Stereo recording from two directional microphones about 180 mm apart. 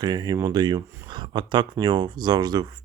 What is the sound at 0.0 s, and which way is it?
Speech, 25° right (ahead or behind).